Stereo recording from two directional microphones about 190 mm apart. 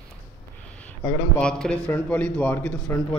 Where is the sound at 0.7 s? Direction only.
5° left (ahead or behind).